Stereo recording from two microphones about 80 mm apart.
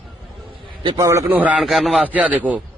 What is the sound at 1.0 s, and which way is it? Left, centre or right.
Speech, right.